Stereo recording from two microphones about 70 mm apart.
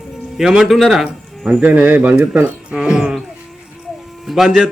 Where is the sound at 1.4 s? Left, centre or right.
Centre.